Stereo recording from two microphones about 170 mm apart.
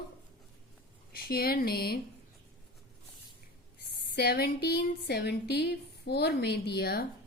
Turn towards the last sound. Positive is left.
turn(degrees=70)  # may be behind; listen again after turning